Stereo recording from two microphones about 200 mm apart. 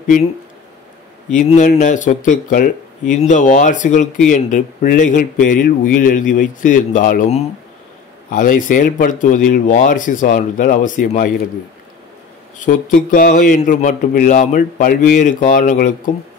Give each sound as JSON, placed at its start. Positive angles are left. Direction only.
{"t": 1.3, "sound": "speech", "side_deg": 40}
{"t": 12.5, "sound": "speech", "side_deg": 40}